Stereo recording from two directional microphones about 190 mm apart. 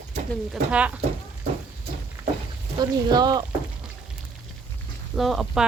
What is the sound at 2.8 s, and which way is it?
Speech, 20° right (ahead or behind).